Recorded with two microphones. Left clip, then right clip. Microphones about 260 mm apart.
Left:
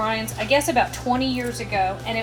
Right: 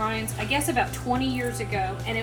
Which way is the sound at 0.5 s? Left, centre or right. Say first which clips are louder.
Left 6 dB; left.